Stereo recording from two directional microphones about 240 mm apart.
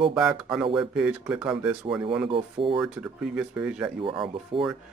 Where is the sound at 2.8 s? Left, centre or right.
Centre.